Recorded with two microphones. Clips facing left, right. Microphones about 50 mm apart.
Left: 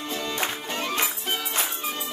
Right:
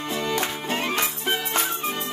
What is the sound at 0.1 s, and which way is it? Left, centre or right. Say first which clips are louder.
Music: right 3 dB; right.